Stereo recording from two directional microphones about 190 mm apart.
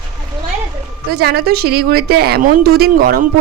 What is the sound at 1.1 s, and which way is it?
Speech, 55° right (ahead or behind).